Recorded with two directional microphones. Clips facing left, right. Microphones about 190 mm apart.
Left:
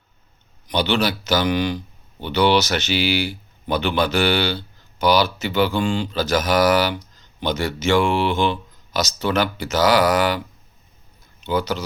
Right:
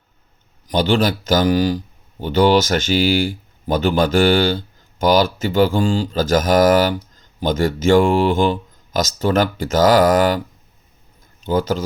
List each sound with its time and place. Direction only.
0.7 s speech: 45° right (ahead or behind)
11.4 s speech: 45° right (ahead or behind)